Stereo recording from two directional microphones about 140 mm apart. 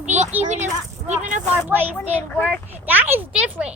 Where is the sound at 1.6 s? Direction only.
15° right (ahead or behind).